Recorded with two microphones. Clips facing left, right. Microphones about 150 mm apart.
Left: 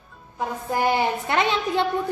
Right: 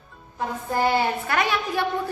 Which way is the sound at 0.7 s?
15° left (ahead or behind).